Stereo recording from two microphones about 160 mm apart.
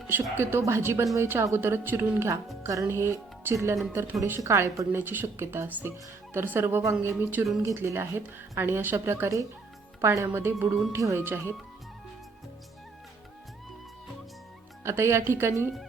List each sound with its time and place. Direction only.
0.1 s a woman's voice: 15° right (ahead or behind)
14.8 s a woman's voice: 15° right (ahead or behind)